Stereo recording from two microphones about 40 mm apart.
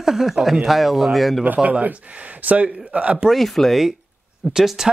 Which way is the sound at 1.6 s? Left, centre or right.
Right.